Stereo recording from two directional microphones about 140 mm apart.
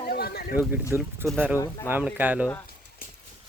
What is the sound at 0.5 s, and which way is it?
Speech, 15° right (ahead or behind).